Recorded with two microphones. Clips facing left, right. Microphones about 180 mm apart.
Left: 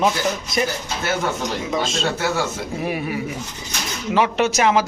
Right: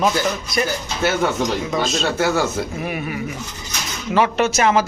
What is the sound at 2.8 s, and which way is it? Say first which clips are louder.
Speech: left 1 dB; 30° left (ahead or behind).